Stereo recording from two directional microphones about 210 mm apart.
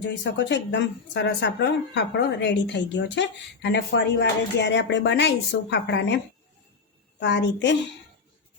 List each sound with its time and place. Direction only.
0.0 s speech: 60° left (ahead or behind)
7.2 s speech: 60° left (ahead or behind)